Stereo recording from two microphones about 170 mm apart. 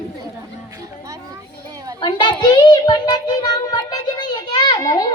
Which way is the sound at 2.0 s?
25° left (ahead or behind).